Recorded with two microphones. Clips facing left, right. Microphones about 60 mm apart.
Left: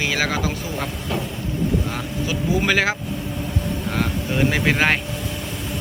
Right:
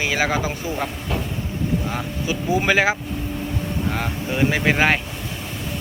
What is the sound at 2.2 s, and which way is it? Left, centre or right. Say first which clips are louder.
Speech: right 1 dB; centre.